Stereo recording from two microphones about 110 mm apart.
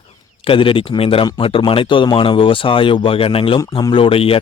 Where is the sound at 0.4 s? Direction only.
55° left (ahead or behind).